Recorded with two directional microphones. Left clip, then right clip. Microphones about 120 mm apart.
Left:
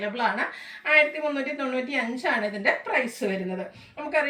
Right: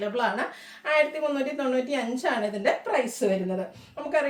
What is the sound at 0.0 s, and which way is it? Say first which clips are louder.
Speech: left 1 dB; 45° right (ahead or behind).